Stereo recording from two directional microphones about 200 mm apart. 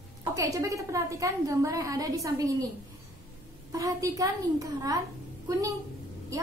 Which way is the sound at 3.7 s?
15° right (ahead or behind).